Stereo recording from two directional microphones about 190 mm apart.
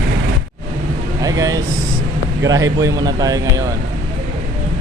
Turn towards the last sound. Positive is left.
turn(degrees=-20)  # may be behind; listen again after turning